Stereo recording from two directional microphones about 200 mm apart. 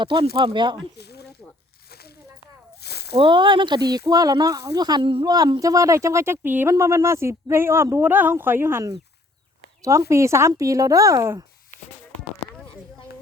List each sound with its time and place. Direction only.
0.0 s speech: 25° right (ahead or behind)
0.9 s a sound: 55° left (ahead or behind)
3.2 s speech: 25° right (ahead or behind)